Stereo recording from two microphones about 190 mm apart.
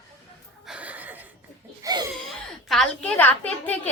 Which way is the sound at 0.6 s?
5° right (ahead or behind).